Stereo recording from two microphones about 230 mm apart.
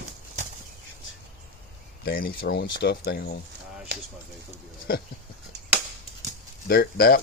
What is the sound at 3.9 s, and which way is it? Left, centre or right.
Speech, right.